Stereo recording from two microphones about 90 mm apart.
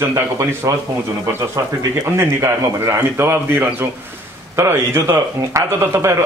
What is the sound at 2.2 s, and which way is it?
A man's voice, 30° right (ahead or behind).